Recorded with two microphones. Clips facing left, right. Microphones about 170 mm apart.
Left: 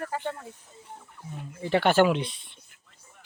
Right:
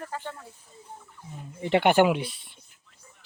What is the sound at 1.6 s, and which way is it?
Speech, 20° right (ahead or behind).